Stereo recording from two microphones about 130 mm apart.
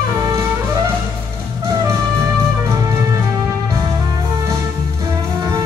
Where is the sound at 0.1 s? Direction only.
25° right (ahead or behind).